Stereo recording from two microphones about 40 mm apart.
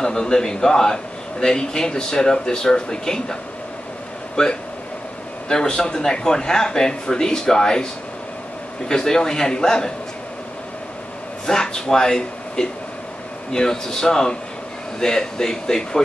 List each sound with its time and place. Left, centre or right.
0.0 s a man's voice: centre
4.4 s a man's voice: centre
11.4 s a man's voice: centre